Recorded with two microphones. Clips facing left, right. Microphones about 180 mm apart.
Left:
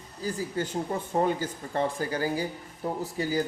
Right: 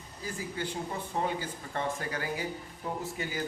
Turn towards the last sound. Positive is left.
turn(degrees=35)  # may be behind; listen again after turning